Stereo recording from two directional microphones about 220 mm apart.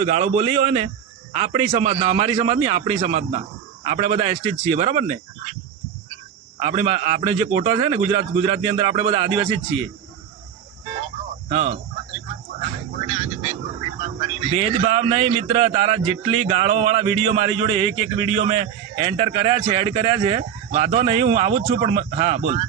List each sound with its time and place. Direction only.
0.0 s a man's voice: 30° right (ahead or behind)
6.6 s a man's voice: 25° right (ahead or behind)
11.0 s a sound: 25° right (ahead or behind)
13.0 s vehicle: 30° right (ahead or behind)
14.0 s a man's voice: 30° right (ahead or behind)